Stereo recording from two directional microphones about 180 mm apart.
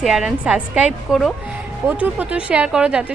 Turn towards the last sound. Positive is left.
turn(degrees=-5)  # may be behind; listen again after turning